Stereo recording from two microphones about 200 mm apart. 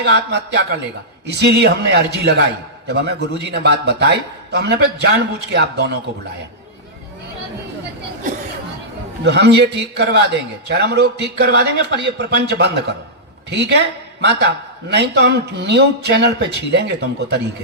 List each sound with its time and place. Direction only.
0.0 s a man's voice: 60° right (ahead or behind)
9.2 s a man's voice: 55° right (ahead or behind)